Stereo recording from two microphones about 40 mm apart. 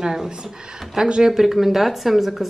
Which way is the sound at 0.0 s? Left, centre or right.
Centre.